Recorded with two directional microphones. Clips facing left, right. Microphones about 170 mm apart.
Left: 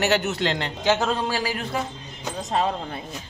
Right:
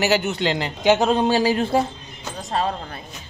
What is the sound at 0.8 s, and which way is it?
Speech, 20° right (ahead or behind).